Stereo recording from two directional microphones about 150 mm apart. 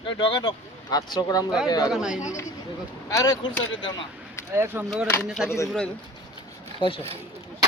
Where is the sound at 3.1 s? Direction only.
25° left (ahead or behind).